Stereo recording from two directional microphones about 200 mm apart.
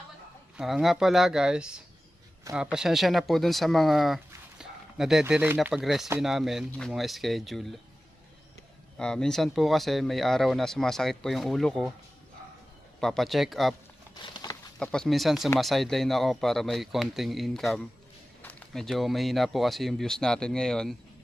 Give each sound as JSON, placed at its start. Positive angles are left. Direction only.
{"t": 0.5, "sound": "speech", "side_deg": 0}
{"t": 9.0, "sound": "speech", "side_deg": 5}
{"t": 13.0, "sound": "speech", "side_deg": 0}
{"t": 14.2, "sound": "patter", "side_deg": 25}
{"t": 14.8, "sound": "speech", "side_deg": 5}